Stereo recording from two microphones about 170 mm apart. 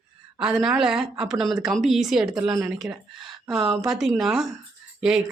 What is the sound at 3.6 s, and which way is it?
Speech, 20° right (ahead or behind).